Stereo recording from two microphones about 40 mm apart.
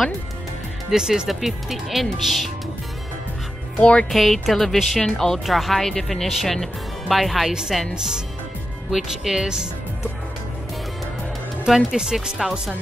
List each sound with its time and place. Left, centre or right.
0.9 s speech: centre
1.3 s speech: centre
3.8 s speech: left
4.1 s speech: centre
5.4 s speech: centre
7.9 s speech: centre
11.6 s speech: centre